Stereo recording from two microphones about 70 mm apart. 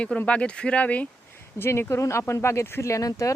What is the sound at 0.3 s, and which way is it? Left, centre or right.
Speech, centre.